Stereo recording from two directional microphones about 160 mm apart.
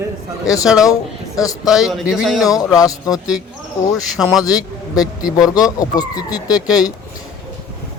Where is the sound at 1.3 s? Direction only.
20° left (ahead or behind).